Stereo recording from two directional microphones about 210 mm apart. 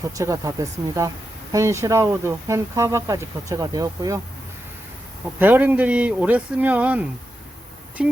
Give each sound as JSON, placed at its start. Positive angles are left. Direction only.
{"t": 0.0, "sound": "speech", "side_deg": -15}
{"t": 5.2, "sound": "speech", "side_deg": -10}